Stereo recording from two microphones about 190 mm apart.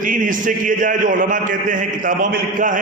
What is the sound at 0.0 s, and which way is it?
A man's voice, 45° right (ahead or behind).